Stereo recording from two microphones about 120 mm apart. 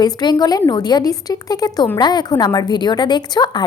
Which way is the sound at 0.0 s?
35° left (ahead or behind).